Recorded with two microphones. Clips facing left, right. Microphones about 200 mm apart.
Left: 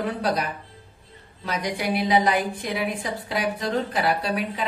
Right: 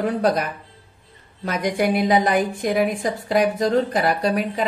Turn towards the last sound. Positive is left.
turn(degrees=-45)  # may be behind; listen again after turning